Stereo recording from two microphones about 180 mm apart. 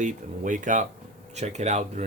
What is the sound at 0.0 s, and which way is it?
Speech, 45° right (ahead or behind).